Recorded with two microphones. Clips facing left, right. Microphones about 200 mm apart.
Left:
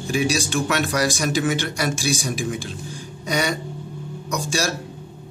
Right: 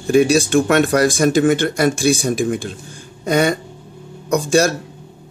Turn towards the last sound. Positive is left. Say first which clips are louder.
# right 10 dB
turn(degrees=-55)  # may be behind; listen again after turning